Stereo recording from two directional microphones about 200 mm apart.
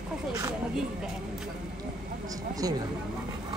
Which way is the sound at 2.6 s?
15° right (ahead or behind).